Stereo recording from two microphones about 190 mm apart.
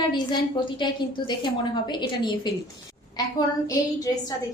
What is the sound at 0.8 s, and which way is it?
A woman's voice, 25° left (ahead or behind).